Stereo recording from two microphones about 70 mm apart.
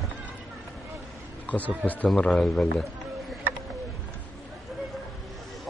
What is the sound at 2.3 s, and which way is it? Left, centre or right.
Speech, centre.